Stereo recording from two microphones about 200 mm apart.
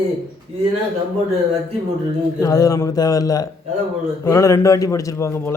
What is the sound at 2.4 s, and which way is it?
Speech, 15° left (ahead or behind).